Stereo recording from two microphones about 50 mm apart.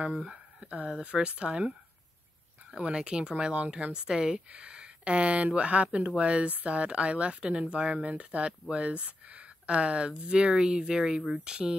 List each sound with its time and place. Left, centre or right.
0.0 s speech: centre
2.7 s speech: centre